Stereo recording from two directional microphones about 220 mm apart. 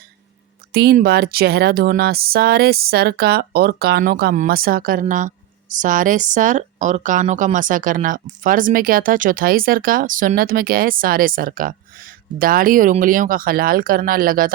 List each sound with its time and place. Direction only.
0.7 s speech: 45° right (ahead or behind)